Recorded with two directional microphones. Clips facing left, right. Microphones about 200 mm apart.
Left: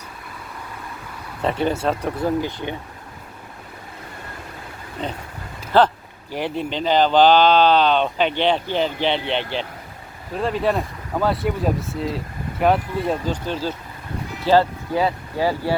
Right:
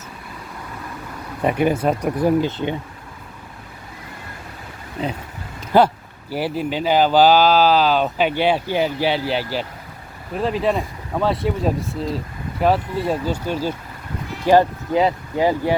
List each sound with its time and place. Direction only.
1.4 s speech: 15° right (ahead or behind)
5.7 s speech: 10° right (ahead or behind)